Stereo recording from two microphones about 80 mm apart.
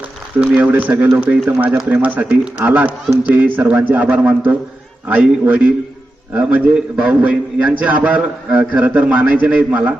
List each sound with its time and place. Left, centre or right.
0.4 s a man's voice: centre